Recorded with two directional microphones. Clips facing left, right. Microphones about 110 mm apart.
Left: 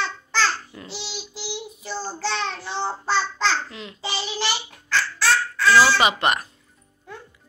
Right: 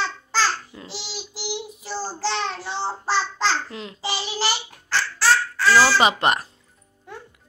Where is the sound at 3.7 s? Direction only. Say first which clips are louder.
Right 2 dB; 35° right (ahead or behind).